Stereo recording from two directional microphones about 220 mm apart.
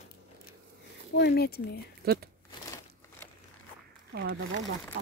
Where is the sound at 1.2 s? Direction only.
50° left (ahead or behind).